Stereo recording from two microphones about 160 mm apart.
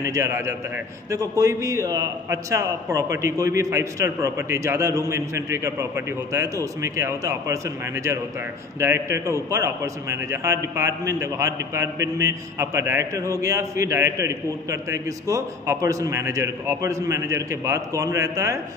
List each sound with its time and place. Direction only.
0.0 s a man's voice: 20° right (ahead or behind)